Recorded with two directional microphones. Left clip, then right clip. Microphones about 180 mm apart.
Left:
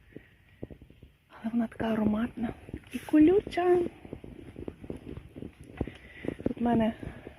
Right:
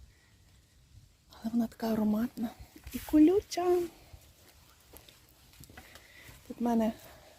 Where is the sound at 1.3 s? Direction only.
Centre (ahead or behind).